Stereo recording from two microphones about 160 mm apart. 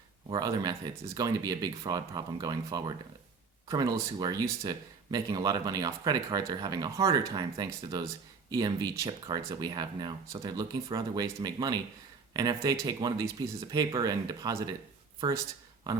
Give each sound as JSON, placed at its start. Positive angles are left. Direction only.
{"t": 0.3, "sound": "speech", "side_deg": -25}